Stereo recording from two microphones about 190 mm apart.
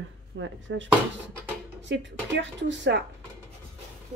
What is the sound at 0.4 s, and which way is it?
A woman's voice, 80° right.